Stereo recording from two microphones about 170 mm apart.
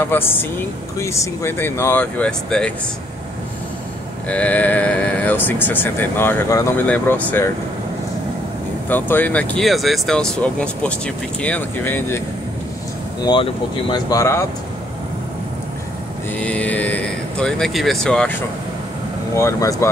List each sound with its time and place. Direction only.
0.0 s speech: 15° left (ahead or behind)
4.3 s speech: 5° left (ahead or behind)
8.8 s speech: 10° left (ahead or behind)
13.2 s speech: 25° left (ahead or behind)
16.3 s speech: 10° left (ahead or behind)
19.3 s speech: 15° left (ahead or behind)